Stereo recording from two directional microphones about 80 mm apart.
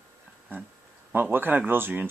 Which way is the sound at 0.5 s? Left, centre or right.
Right.